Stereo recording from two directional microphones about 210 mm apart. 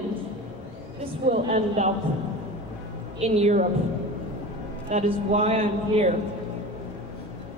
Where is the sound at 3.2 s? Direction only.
30° right (ahead or behind).